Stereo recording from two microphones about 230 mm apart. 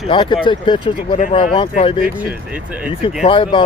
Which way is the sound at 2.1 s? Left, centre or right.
Centre.